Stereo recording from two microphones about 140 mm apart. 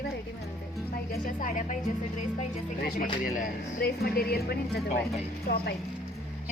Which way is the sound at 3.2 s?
80° left.